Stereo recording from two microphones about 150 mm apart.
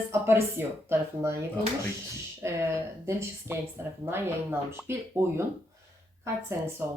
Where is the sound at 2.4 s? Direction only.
15° right (ahead or behind).